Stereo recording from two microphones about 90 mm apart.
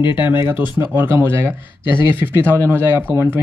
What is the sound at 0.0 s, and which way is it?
Speech, 60° left (ahead or behind).